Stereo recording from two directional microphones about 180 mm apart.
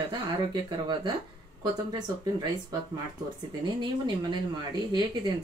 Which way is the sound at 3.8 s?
25° right (ahead or behind).